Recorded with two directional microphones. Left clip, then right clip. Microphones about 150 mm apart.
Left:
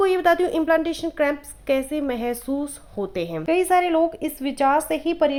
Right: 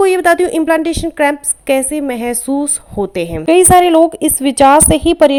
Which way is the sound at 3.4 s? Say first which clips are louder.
Right 12 dB; 40° right (ahead or behind).